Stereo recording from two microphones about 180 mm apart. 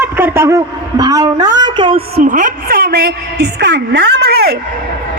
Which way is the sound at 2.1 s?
45° right (ahead or behind).